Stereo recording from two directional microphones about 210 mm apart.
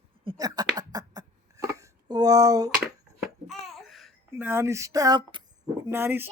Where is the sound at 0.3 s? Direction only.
15° right (ahead or behind).